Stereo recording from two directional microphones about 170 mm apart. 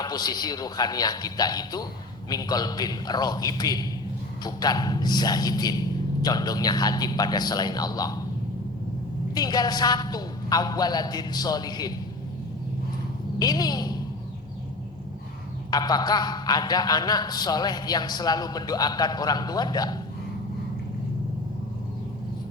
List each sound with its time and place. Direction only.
0.0 s a man's voice: 25° left (ahead or behind)
9.3 s a man's voice: 25° left (ahead or behind)
13.4 s a man's voice: 25° left (ahead or behind)
15.7 s a man's voice: 25° left (ahead or behind)